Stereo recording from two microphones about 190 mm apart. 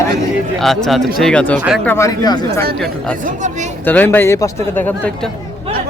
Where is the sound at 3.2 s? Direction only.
40° right (ahead or behind).